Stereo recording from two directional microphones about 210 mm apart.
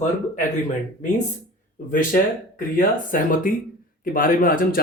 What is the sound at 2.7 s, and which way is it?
Speech, 40° left (ahead or behind).